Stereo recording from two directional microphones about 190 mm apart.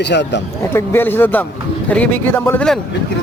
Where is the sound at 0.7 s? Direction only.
10° left (ahead or behind).